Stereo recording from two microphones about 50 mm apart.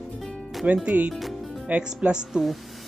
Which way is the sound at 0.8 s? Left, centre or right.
Right.